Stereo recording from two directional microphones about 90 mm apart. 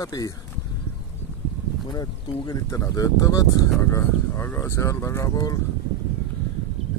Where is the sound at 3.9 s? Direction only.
25° left (ahead or behind).